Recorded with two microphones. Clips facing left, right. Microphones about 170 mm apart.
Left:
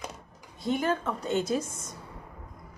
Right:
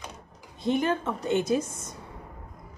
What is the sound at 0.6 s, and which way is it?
A woman's voice, 20° right (ahead or behind).